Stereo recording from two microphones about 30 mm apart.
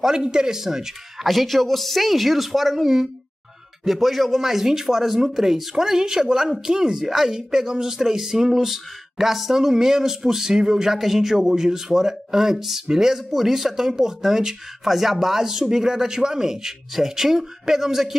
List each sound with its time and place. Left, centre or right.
0.0 s speech: right
1.2 s speech: centre
7.1 s speech: centre